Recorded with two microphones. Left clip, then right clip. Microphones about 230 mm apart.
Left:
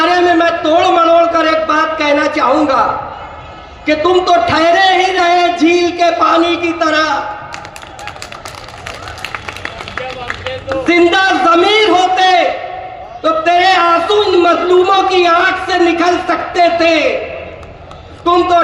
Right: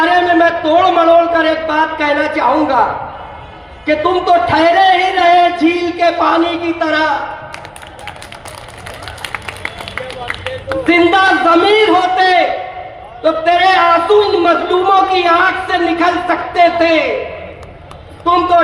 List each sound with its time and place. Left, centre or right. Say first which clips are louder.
0.0 s a sound: even; left
3.8 s speech: left 1 dB; left
10.7 s speech: even; left
18.3 s speech: left 1 dB; left